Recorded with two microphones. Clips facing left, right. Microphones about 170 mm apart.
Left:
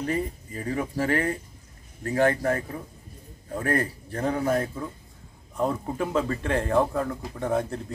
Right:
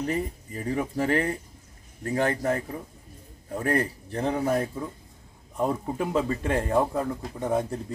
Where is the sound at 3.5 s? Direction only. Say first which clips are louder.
Even; 20° right (ahead or behind).